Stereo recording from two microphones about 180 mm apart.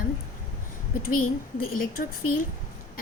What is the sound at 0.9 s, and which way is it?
A woman's voice, 50° left (ahead or behind).